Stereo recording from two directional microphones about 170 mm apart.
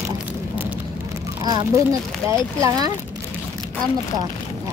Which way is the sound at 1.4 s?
25° right (ahead or behind).